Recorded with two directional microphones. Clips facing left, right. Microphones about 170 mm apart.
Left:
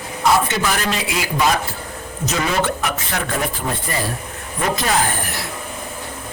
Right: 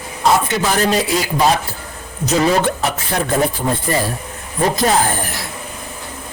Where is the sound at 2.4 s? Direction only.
30° right (ahead or behind).